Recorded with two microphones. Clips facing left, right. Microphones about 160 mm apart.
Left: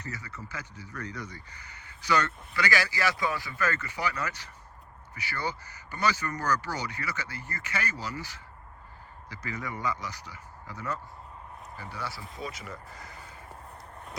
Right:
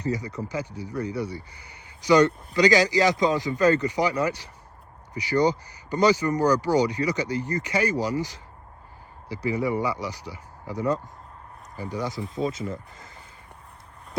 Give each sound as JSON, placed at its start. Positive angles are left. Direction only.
{"t": 0.0, "sound": "speech", "side_deg": -15}
{"t": 9.3, "sound": "speech", "side_deg": -15}